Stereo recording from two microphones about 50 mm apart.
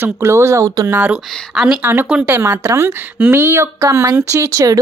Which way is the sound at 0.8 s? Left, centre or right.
Right.